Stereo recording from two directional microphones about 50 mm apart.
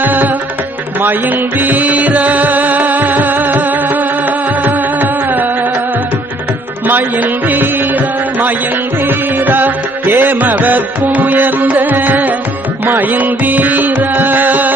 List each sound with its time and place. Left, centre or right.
0.0 s music: right
1.5 s music: right
6.8 s music: right